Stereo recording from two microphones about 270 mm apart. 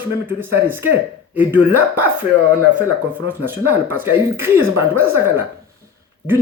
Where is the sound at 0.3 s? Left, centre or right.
Centre.